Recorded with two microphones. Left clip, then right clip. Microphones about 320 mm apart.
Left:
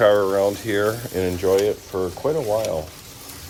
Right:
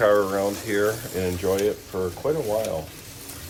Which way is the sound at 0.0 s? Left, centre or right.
Left.